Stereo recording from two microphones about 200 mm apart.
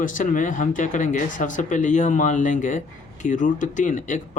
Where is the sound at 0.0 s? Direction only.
40° left (ahead or behind).